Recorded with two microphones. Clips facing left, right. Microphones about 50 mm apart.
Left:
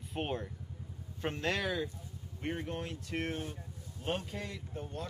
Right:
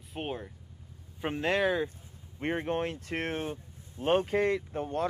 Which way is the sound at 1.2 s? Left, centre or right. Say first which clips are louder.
Right 6 dB; right.